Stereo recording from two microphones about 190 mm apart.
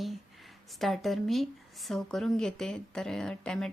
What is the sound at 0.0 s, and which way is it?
Speech, centre (ahead or behind).